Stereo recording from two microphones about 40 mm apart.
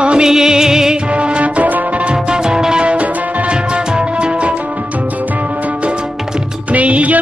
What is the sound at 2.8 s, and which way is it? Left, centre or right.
Music, right.